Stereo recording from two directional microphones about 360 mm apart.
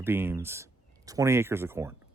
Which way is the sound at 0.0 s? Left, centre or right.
Centre.